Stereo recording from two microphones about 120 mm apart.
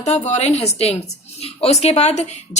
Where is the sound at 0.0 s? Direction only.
65° left (ahead or behind).